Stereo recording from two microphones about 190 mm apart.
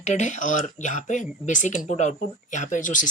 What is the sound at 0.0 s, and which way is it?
Speech, 40° left (ahead or behind).